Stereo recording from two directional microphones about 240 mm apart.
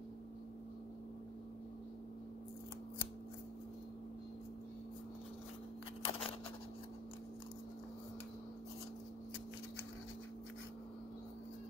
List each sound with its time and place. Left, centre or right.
6.0 s scissors: left